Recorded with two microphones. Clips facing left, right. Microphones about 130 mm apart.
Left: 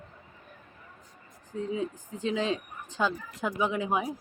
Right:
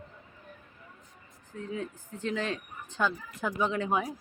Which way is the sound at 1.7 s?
15° left (ahead or behind).